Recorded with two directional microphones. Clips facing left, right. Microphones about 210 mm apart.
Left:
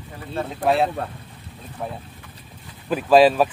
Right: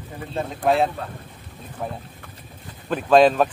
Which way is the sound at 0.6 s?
Centre (ahead or behind).